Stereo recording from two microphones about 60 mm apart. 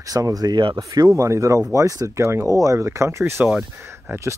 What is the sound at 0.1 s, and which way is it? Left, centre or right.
Speech, right.